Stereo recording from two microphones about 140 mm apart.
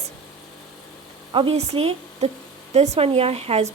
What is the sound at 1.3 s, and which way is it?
A woman's voice, 45° right (ahead or behind).